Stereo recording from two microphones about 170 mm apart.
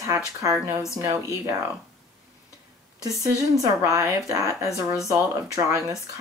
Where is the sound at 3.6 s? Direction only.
20° right (ahead or behind).